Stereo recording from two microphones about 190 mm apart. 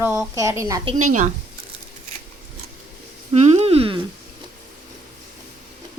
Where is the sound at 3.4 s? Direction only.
35° right (ahead or behind).